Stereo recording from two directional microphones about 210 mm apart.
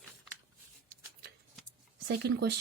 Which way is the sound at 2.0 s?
50° right (ahead or behind).